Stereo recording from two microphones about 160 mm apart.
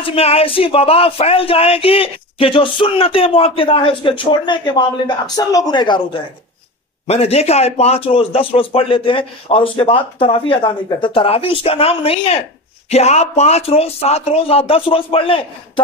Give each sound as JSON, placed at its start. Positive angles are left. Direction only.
{"t": 0.0, "sound": "speech", "side_deg": 35}
{"t": 7.1, "sound": "speech", "side_deg": 40}